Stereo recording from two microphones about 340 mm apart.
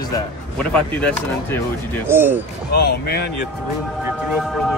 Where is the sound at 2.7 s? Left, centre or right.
Left.